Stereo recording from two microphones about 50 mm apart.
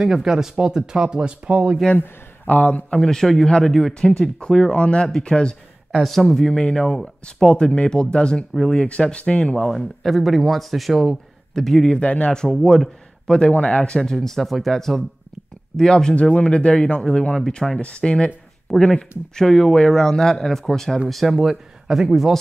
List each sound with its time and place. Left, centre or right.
0.0 s speech: centre
1.5 s speech: right
2.0 s speech: left
3.0 s a man's voice: centre
5.9 s speech: centre
6.2 s a man's voice: centre
9.6 s speech: centre
11.5 s a man's voice: centre
12.0 s speech: left
12.6 s speech: centre
13.9 s a man's voice: centre
18.7 s a man's voice: centre